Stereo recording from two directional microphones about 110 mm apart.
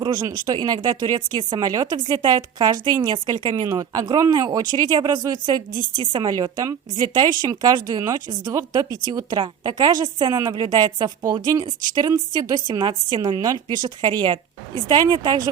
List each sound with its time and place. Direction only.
0.0 s speech: 40° right (ahead or behind)